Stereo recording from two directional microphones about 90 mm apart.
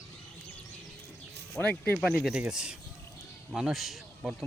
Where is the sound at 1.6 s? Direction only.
15° left (ahead or behind).